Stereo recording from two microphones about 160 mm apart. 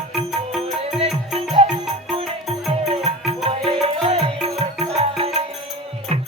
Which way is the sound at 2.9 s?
35° right (ahead or behind).